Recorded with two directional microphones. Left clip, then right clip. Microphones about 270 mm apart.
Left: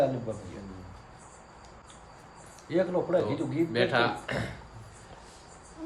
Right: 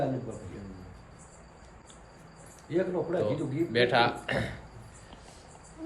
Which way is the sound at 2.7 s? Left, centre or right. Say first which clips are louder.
Left 3 dB; left.